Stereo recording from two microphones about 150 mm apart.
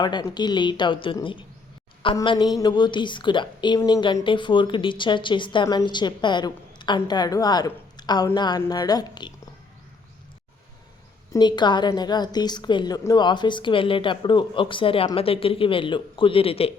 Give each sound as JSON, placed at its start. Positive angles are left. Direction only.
{"t": 0.0, "sound": "a woman's voice", "side_deg": 30}
{"t": 11.3, "sound": "a woman's voice", "side_deg": 30}